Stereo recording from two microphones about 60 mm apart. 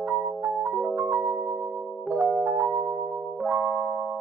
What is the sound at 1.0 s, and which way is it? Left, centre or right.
Music, right.